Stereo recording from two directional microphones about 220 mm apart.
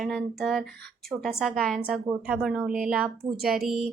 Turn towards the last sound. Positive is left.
turn(degrees=0)  # may be behind; listen again after turning